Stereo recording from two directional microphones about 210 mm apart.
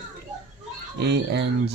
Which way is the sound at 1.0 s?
55° right (ahead or behind).